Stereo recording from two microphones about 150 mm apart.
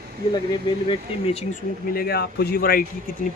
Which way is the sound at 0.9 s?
40° left (ahead or behind).